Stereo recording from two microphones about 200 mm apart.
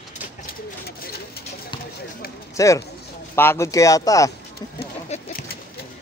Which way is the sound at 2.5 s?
15° left (ahead or behind).